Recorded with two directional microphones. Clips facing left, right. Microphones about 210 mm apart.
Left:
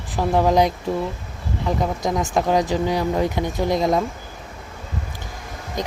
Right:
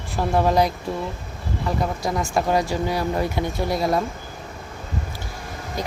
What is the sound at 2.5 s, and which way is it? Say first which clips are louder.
Speech: left 3 dB; 15° left (ahead or behind).